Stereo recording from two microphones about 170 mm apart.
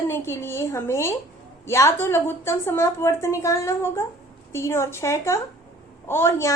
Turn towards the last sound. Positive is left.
turn(degrees=15)  # may be behind; listen again after turning